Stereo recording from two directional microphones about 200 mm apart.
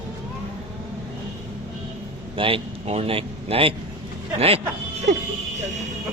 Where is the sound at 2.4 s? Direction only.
30° right (ahead or behind).